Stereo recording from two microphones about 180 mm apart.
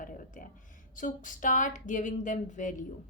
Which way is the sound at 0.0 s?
50° left (ahead or behind).